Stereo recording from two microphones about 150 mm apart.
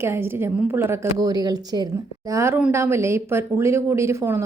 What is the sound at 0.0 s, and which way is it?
Speech, 15° right (ahead or behind).